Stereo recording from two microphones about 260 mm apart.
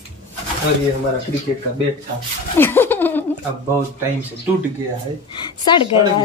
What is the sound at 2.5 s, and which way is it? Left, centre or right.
Speech, centre.